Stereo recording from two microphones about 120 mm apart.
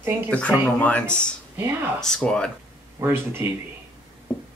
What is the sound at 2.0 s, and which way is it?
Speech, 5° left (ahead or behind).